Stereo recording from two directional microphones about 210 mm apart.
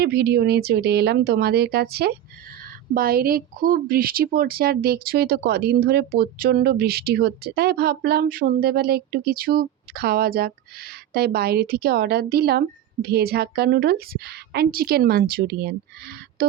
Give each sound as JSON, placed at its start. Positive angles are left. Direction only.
{"t": 0.0, "sound": "speech", "side_deg": -50}